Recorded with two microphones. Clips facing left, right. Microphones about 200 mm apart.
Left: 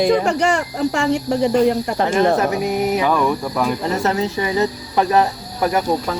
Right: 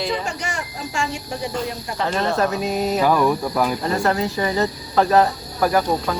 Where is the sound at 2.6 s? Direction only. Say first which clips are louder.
Left 2 dB; 15° left (ahead or behind).